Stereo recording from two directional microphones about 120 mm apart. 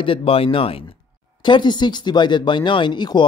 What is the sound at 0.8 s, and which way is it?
Speech, 40° left (ahead or behind).